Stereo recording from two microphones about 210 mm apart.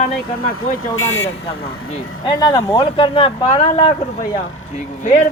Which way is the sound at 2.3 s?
20° left (ahead or behind).